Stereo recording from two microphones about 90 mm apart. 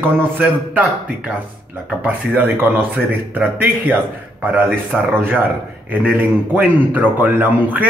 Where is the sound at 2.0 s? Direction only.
20° right (ahead or behind).